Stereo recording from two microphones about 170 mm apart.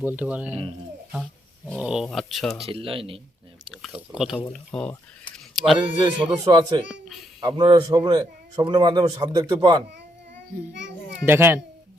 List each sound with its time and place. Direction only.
0.0 s speech: 10° right (ahead or behind)
1.8 s speech: 5° right (ahead or behind)
2.6 s speech: 30° right (ahead or behind)
3.7 s speech: centre (ahead or behind)
4.5 s speech: 10° left (ahead or behind)
5.3 s a sound: centre (ahead or behind)
6.0 s a man's voice: 25° right (ahead or behind)
11.3 s speech: 15° right (ahead or behind)